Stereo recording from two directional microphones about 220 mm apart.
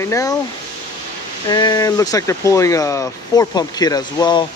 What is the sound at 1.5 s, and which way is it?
Speech, 20° left (ahead or behind).